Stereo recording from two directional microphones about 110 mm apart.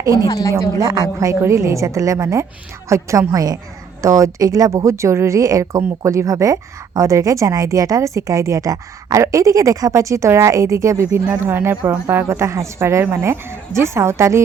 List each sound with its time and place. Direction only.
0.2 s a woman's voice: 35° left (ahead or behind)
0.8 s speech: 30° right (ahead or behind)